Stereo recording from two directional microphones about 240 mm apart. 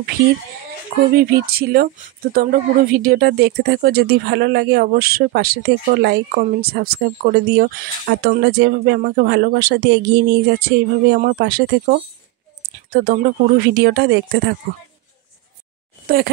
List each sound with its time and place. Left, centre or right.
1.1 s speech: right
16.1 s speech: right